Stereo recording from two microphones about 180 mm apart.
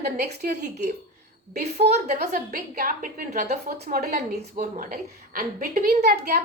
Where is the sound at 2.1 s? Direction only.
55° right (ahead or behind).